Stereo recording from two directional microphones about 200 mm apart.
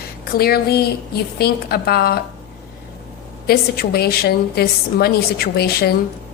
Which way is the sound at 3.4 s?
50° left (ahead or behind).